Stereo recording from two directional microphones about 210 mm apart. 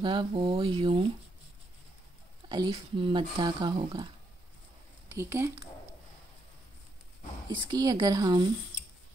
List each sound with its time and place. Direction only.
0.0 s speech: 25° right (ahead or behind)
2.5 s speech: 20° right (ahead or behind)
5.1 s speech: 10° right (ahead or behind)
7.4 s speech: 20° right (ahead or behind)